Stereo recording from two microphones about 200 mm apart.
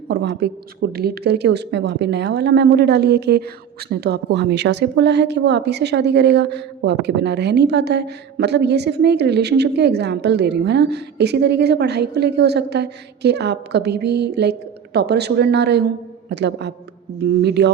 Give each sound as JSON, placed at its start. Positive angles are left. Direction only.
{"t": 0.1, "sound": "a woman's voice", "side_deg": -55}